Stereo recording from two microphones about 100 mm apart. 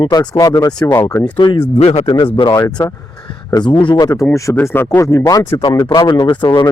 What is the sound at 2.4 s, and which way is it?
Speech, 60° left (ahead or behind).